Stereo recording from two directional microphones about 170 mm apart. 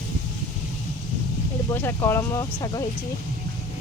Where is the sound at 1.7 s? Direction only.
15° left (ahead or behind).